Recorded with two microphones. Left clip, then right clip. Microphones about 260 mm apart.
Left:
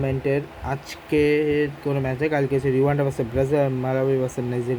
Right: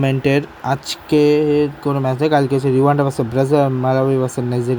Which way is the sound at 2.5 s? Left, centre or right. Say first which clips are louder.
Right 6 dB; right.